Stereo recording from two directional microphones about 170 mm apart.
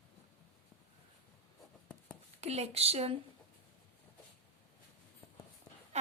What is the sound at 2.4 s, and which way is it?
Speech, 40° right (ahead or behind).